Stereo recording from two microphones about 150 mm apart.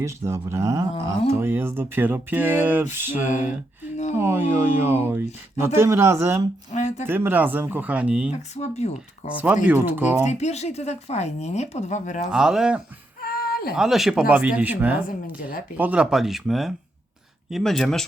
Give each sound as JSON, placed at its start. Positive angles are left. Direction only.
{"t": 0.0, "sound": "speech", "side_deg": -20}
{"t": 3.9, "sound": "a sound", "side_deg": 50}
{"t": 4.2, "sound": "speech", "side_deg": -15}
{"t": 6.7, "sound": "a sound", "side_deg": 50}
{"t": 7.1, "sound": "speech", "side_deg": -15}
{"t": 8.3, "sound": "speech", "side_deg": 50}
{"t": 9.6, "sound": "speech", "side_deg": -10}
{"t": 10.2, "sound": "speech", "side_deg": 50}
{"t": 12.3, "sound": "speech", "side_deg": -5}
{"t": 13.2, "sound": "a sound", "side_deg": 85}
{"t": 13.7, "sound": "speech", "side_deg": 0}
{"t": 15.4, "sound": "speech", "side_deg": 70}
{"t": 15.8, "sound": "speech", "side_deg": -10}